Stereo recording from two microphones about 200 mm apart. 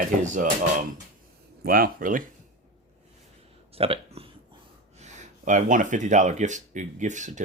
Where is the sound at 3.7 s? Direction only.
30° right (ahead or behind).